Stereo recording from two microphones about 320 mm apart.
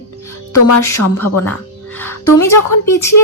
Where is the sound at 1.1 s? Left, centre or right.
Left.